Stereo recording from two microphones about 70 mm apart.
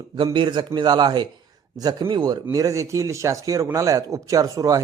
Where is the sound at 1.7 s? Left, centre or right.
Right.